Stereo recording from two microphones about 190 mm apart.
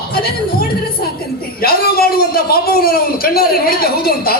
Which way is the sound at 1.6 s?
50° left (ahead or behind).